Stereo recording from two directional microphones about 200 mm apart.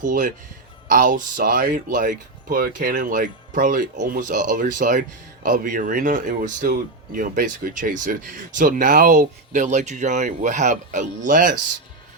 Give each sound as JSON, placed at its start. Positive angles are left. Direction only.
{"t": 0.0, "sound": "speech", "side_deg": -40}